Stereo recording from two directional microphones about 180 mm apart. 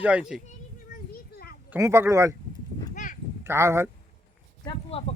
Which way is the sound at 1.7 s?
15° right (ahead or behind).